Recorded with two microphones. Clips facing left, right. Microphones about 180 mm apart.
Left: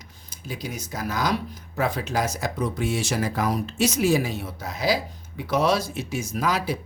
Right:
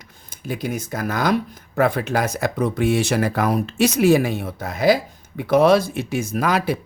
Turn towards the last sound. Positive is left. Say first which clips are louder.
# right 5 dB
turn(degrees=-60)  # may be behind; listen again after turning